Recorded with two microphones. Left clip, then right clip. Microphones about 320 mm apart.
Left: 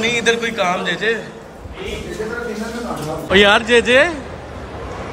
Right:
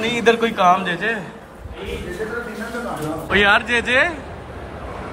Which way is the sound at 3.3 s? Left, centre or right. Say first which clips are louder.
Left 4 dB; centre.